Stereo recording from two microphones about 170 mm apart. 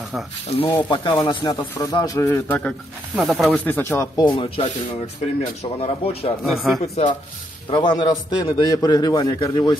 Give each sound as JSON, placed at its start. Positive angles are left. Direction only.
{"t": 0.5, "sound": "a man's voice", "side_deg": 35}
{"t": 3.2, "sound": "speech", "side_deg": 0}
{"t": 4.2, "sound": "a man's voice", "side_deg": 30}
{"t": 6.4, "sound": "speech", "side_deg": 0}
{"t": 7.7, "sound": "a man's voice", "side_deg": 25}